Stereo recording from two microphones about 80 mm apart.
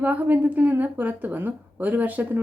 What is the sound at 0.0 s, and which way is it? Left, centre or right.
A woman's voice, centre.